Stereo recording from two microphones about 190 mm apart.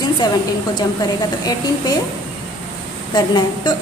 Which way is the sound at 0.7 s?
20° left (ahead or behind).